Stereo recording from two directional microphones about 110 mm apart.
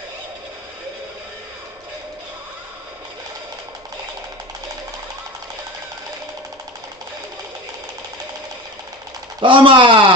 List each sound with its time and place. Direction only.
9.4 s speech: 50° right (ahead or behind)